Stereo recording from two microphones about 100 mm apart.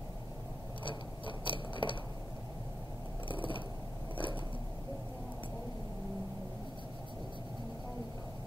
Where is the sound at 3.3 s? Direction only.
60° left (ahead or behind).